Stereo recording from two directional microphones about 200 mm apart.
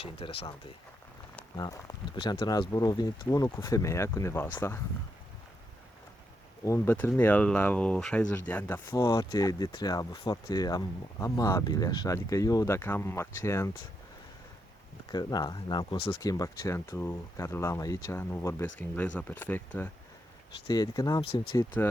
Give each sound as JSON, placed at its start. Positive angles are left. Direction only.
{"t": 0.0, "sound": "speech", "side_deg": 25}
{"t": 6.7, "sound": "speech", "side_deg": 10}
{"t": 15.1, "sound": "speech", "side_deg": 20}